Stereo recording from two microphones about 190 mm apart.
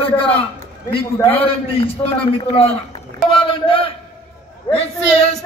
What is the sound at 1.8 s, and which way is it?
A man's voice, 30° left (ahead or behind).